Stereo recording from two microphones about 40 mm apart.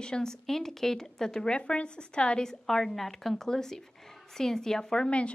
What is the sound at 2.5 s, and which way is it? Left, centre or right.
Speech, centre.